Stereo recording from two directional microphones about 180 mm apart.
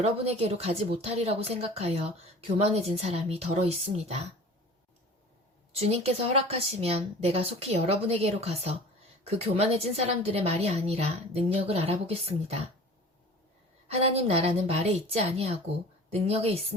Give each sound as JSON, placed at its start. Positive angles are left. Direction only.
{"t": 0.0, "sound": "speech", "side_deg": -35}
{"t": 5.8, "sound": "speech", "side_deg": -35}
{"t": 13.9, "sound": "speech", "side_deg": -35}